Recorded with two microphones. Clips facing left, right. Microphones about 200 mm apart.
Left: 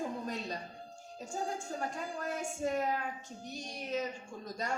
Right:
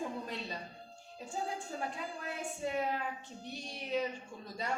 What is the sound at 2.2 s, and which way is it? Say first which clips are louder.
Child singing: left 4 dB; 45° left (ahead or behind).